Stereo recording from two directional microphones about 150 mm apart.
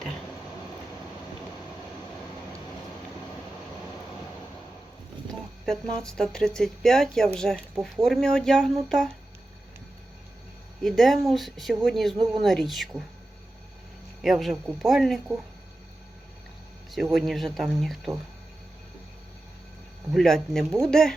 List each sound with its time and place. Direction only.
5.3 s a sound: 5° left (ahead or behind)
6.0 s speech: 5° left (ahead or behind)
10.8 s speech: centre (ahead or behind)
12.1 s speech: 30° right (ahead or behind)
12.4 s speech: centre (ahead or behind)
14.2 s speech: centre (ahead or behind)
16.9 s speech: centre (ahead or behind)
20.1 s speech: 5° left (ahead or behind)